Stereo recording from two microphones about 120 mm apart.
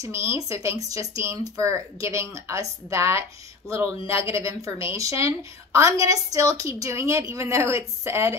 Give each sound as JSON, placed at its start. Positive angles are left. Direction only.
{"t": 0.0, "sound": "a woman's voice", "side_deg": -25}